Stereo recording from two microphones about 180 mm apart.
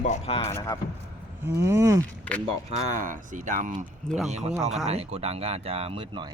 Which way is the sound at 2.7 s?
45° right (ahead or behind).